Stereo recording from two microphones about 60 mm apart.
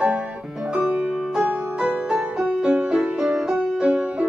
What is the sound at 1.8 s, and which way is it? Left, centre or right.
Music, centre.